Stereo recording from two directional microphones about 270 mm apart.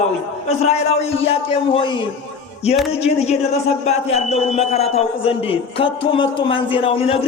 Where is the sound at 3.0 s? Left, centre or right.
Left.